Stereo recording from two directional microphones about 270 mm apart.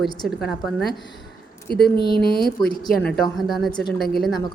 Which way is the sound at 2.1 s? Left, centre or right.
Left.